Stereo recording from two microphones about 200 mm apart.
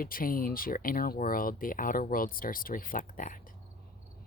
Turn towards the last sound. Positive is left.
turn(degrees=40)  # may be behind; listen again after turning